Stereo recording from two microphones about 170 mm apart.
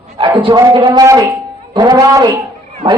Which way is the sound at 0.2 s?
30° right (ahead or behind).